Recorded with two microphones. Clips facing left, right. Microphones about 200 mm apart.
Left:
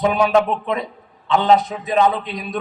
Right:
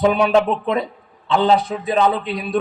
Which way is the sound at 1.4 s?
30° right (ahead or behind).